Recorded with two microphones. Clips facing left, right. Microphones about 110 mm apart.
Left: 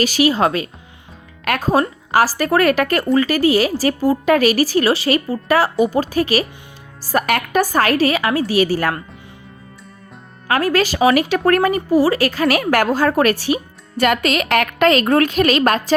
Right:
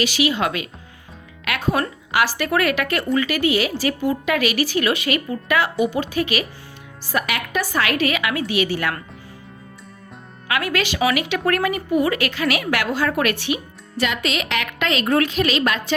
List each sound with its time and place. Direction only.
0.0 s a woman's voice: 40° left (ahead or behind)
10.5 s a woman's voice: 40° left (ahead or behind)
14.0 s a woman's voice: 50° left (ahead or behind)